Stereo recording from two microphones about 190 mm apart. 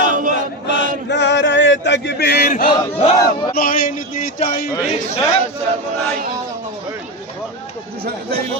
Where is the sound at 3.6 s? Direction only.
45° left (ahead or behind).